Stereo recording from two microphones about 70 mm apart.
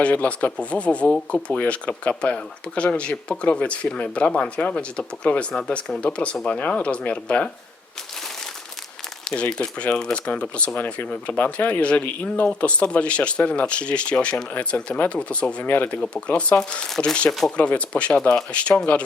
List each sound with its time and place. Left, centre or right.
0.0 s speech: centre
9.2 s speech: centre